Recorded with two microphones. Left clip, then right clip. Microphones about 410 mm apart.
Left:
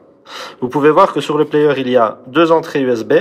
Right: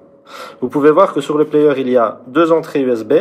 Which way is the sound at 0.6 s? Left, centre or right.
Left.